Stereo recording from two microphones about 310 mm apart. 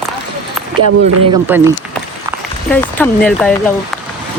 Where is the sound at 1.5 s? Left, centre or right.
Centre.